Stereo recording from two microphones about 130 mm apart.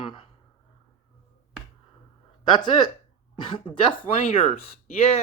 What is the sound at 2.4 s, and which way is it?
Speech, 35° left (ahead or behind).